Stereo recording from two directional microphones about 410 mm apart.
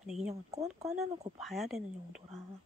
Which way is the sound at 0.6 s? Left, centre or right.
Centre.